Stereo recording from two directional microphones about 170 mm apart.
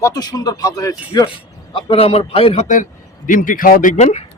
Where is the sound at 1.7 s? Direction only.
35° left (ahead or behind).